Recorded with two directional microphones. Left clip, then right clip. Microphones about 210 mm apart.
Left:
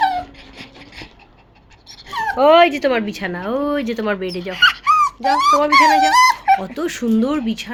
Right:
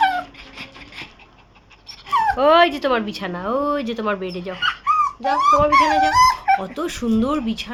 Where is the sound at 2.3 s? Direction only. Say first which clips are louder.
Left 5 dB; 10° left (ahead or behind).